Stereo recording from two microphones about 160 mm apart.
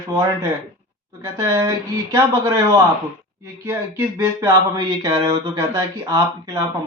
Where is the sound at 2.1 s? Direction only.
20° right (ahead or behind).